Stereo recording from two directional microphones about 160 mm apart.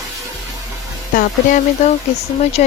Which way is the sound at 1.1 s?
60° left (ahead or behind).